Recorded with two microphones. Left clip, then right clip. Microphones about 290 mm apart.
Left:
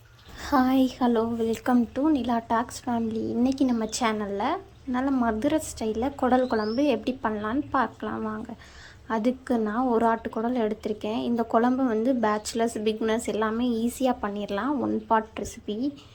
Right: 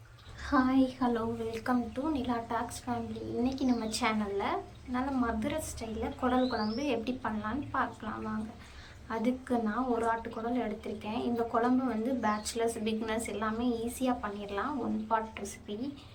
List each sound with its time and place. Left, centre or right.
0.4 s speech: left